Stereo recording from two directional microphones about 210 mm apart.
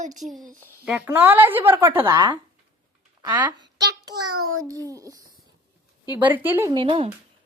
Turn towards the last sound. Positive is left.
turn(degrees=-25)  # may be behind; listen again after turning